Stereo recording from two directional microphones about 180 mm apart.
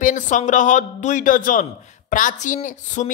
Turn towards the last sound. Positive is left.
turn(degrees=45)  # may be behind; listen again after turning